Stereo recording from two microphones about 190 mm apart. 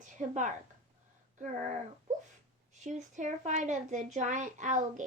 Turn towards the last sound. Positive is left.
turn(degrees=-40)  # may be behind; listen again after turning